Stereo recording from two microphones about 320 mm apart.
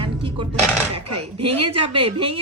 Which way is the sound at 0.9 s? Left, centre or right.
Right.